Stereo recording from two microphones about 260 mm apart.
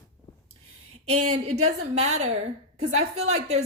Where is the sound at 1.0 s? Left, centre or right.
Right.